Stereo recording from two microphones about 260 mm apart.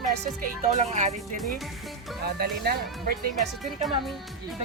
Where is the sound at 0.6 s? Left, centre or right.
Right.